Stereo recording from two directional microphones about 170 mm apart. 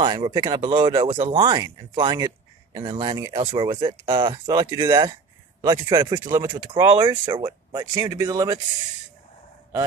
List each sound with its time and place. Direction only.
0.0 s speech: 25° right (ahead or behind)